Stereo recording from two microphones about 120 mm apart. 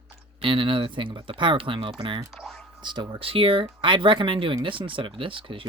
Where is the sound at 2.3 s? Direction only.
5° left (ahead or behind).